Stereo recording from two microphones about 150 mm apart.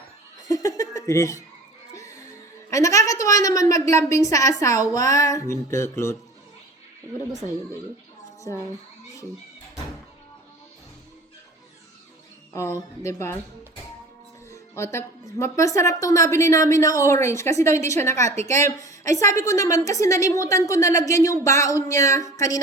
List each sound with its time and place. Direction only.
0.4 s laughter: 20° left (ahead or behind)
1.9 s music: 20° left (ahead or behind)
2.6 s a woman's voice: 20° left (ahead or behind)
8.5 s a woman's voice: 25° left (ahead or behind)
12.5 s a woman's voice: 20° left (ahead or behind)
14.5 s a woman's voice: 20° left (ahead or behind)